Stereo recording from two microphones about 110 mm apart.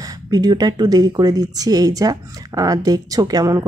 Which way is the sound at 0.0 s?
35° right (ahead or behind).